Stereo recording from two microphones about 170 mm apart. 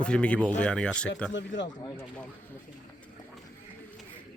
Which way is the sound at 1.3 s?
90° left.